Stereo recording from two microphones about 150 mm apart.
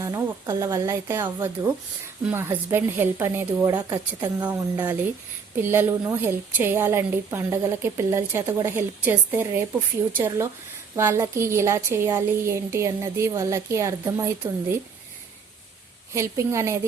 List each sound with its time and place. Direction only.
0.0 s a woman's voice: 20° right (ahead or behind)
4.4 s a woman's voice: 10° right (ahead or behind)
16.1 s a woman's voice: 20° right (ahead or behind)